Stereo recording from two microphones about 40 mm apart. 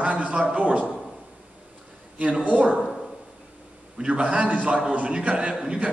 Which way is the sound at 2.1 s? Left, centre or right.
Right.